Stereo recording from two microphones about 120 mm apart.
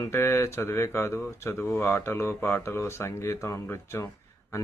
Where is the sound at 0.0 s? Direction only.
20° left (ahead or behind).